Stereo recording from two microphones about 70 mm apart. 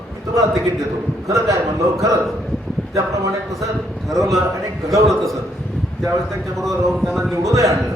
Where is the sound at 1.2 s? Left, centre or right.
Right.